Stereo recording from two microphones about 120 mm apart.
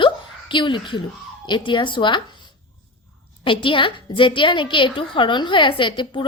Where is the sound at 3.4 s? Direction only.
45° left (ahead or behind).